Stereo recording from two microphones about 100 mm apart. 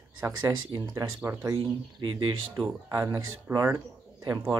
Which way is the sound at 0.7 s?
40° right (ahead or behind).